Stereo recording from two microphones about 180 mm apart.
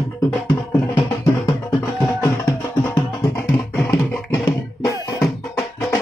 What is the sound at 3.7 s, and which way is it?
Music, 10° left (ahead or behind).